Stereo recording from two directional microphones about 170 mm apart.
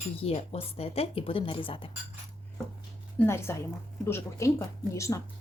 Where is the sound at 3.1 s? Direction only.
15° left (ahead or behind).